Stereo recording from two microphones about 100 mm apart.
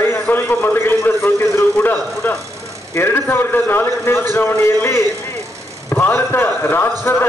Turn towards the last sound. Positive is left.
turn(degrees=20)  # may be behind; listen again after turning